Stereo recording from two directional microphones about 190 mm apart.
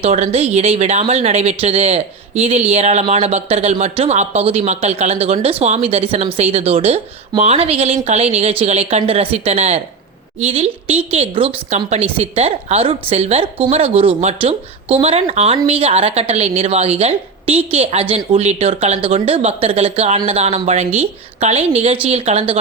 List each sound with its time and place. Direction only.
0.0 s speech: 30° right (ahead or behind)